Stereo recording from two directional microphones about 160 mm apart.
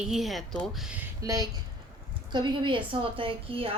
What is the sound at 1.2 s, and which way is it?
A woman's voice, 20° right (ahead or behind).